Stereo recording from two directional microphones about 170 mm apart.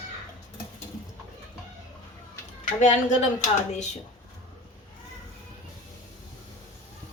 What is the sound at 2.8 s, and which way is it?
A woman's voice, 45° left (ahead or behind).